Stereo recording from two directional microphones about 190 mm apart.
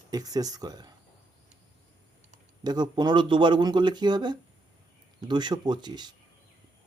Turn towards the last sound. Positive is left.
turn(degrees=-20)  # may be behind; listen again after turning